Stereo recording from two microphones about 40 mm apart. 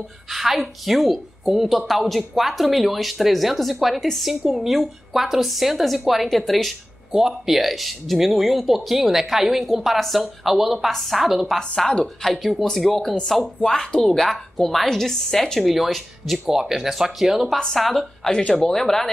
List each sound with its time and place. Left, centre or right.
0.3 s a woman's voice: centre
7.1 s a woman's voice: centre
11.9 s a woman's voice: centre
12.4 s a woman's voice: centre
15.6 s a woman's voice: centre
17.7 s a woman's voice: centre